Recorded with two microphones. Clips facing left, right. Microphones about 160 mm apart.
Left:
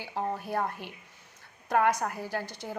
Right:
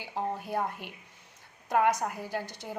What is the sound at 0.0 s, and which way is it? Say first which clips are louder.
A woman's voice: left 1 dB; 20° right (ahead or behind).